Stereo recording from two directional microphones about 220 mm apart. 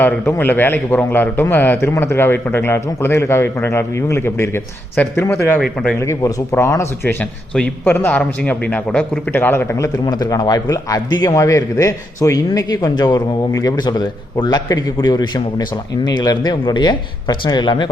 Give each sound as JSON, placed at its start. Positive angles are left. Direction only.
{"t": 0.0, "sound": "a man's voice", "side_deg": 10}
{"t": 5.5, "sound": "a man's voice", "side_deg": 0}
{"t": 6.0, "sound": "a man's voice", "side_deg": 15}